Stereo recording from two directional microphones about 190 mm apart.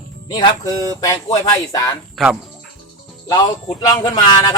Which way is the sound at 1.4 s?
20° left (ahead or behind).